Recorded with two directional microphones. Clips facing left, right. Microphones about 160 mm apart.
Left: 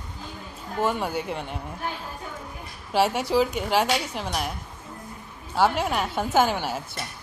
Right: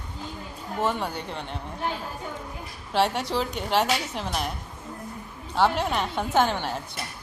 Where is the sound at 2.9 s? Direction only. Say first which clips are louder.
Left 2 dB; 5° left (ahead or behind).